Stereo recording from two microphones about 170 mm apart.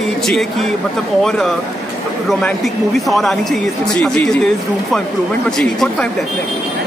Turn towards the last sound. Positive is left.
turn(degrees=5)  # may be behind; listen again after turning